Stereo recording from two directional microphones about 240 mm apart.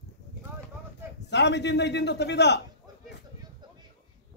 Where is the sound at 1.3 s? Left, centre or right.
Left.